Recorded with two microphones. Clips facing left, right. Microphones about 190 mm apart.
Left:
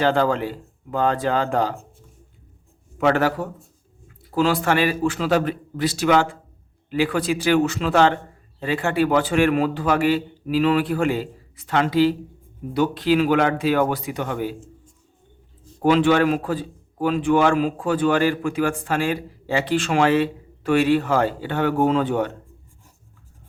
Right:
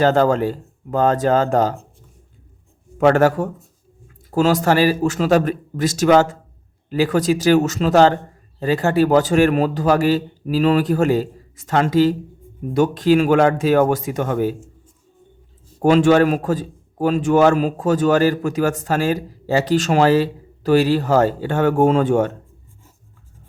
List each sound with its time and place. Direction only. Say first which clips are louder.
0.0 s a man's voice: right 4 dB; 45° right (ahead or behind)
3.0 s a man's voice: right 5 dB; 45° right (ahead or behind)
15.8 s a man's voice: right 4 dB; 45° right (ahead or behind)